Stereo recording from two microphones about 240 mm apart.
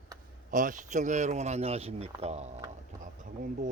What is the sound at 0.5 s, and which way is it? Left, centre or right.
Speech, right.